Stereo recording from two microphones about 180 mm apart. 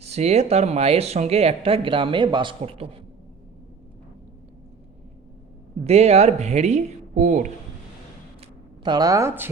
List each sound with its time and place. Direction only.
0.0 s speech: 35° right (ahead or behind)
5.8 s speech: 35° right (ahead or behind)
8.8 s a woman's voice: 25° right (ahead or behind)